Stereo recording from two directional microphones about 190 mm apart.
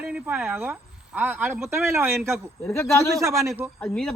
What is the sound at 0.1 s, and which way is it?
Speech, 5° right (ahead or behind).